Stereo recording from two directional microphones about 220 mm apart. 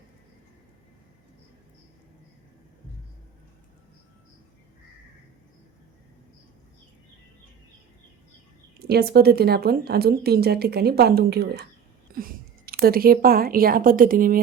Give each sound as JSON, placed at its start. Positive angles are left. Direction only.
{"t": 8.9, "sound": "a woman's voice", "side_deg": -45}